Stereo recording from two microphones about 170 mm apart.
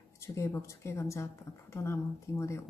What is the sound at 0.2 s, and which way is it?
A woman's voice, 15° left (ahead or behind).